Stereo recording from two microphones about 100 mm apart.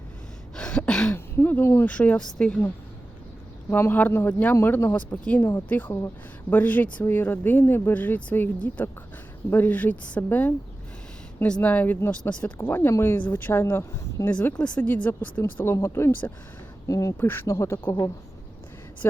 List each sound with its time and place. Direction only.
0.5 s a sound: 10° left (ahead or behind)
1.1 s speech: 20° left (ahead or behind)
3.7 s speech: 20° left (ahead or behind)
14.3 s speech: 10° left (ahead or behind); by 17.2 s 35° left (ahead or behind)
17.2 s speech: 25° left (ahead or behind)